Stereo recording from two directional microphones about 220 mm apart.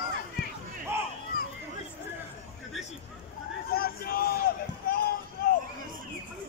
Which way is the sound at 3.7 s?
45° left (ahead or behind).